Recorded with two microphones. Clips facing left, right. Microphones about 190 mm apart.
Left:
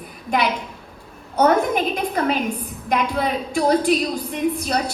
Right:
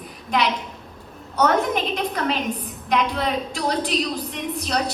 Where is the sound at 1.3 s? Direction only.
50° left (ahead or behind).